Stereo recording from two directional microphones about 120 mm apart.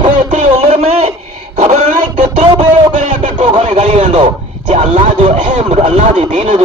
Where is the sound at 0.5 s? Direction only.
55° right (ahead or behind).